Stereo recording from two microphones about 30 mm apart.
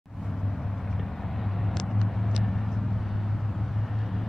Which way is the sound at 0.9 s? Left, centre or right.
Centre.